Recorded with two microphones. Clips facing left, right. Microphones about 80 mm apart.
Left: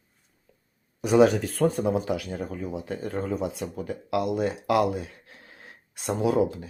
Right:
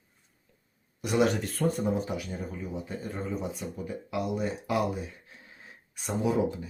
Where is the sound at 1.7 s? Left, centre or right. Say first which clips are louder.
Left 4 dB; left.